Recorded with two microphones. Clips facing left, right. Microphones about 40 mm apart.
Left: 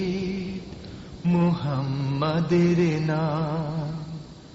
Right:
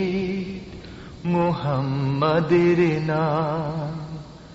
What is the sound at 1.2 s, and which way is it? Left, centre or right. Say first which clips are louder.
Mantra: right 2 dB; centre.